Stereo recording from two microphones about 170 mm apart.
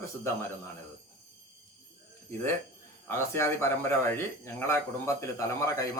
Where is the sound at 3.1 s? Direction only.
15° left (ahead or behind).